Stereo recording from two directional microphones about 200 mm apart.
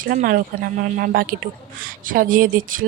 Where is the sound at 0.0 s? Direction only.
45° right (ahead or behind).